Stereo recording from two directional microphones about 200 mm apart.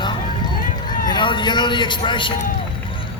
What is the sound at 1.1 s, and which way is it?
A man's voice, 25° left (ahead or behind).